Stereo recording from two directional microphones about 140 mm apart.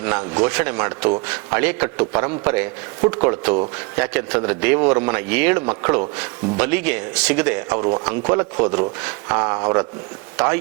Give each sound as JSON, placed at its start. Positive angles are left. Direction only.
{"t": 0.3, "sound": "a man's voice", "side_deg": -10}